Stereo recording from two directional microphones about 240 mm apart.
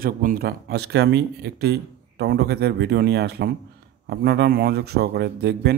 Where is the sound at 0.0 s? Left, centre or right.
Right.